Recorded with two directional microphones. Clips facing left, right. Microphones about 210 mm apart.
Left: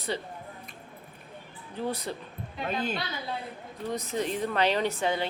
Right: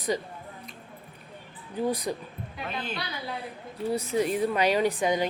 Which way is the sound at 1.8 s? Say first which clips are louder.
Right 4 dB; 10° right (ahead or behind).